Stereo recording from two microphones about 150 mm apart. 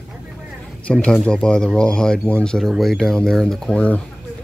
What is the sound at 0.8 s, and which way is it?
Speech, 5° left (ahead or behind).